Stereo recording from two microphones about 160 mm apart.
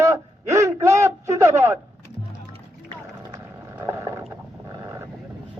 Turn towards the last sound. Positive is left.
turn(degrees=-20)  # may be behind; listen again after turning